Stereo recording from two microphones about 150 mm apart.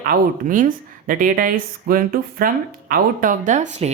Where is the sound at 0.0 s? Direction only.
70° right (ahead or behind).